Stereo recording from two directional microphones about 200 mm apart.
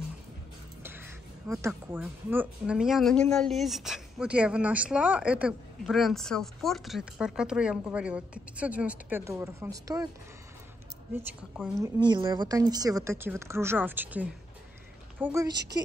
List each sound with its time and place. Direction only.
1.7 s speech: 10° right (ahead or behind)
11.1 s speech: 5° right (ahead or behind)
11.8 s a woman's voice: 20° right (ahead or behind)
15.4 s a woman's voice: 20° right (ahead or behind)